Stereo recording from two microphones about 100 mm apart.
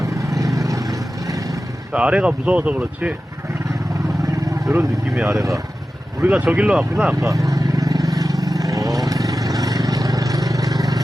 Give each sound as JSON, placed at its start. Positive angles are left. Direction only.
{"t": 0.0, "sound": "vehicle", "side_deg": -30}
{"t": 1.9, "sound": "speech", "side_deg": -10}
{"t": 4.3, "sound": "vehicle", "side_deg": -30}
{"t": 5.1, "sound": "speech", "side_deg": -5}
{"t": 7.1, "sound": "vehicle", "side_deg": -30}